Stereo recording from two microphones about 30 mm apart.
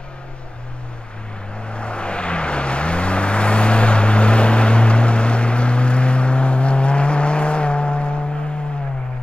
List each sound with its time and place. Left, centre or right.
1.7 s vehicle: left